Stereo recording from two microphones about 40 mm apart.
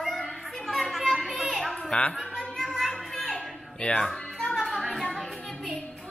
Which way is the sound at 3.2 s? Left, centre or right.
Left.